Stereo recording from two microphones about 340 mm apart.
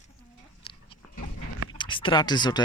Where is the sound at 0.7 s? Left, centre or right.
Centre.